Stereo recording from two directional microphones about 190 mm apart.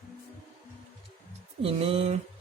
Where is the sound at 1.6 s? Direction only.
30° right (ahead or behind).